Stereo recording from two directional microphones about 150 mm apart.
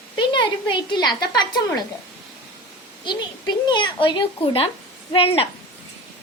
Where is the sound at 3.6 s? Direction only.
30° left (ahead or behind).